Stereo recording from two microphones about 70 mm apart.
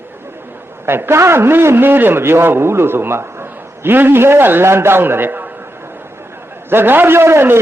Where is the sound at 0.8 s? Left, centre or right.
Right.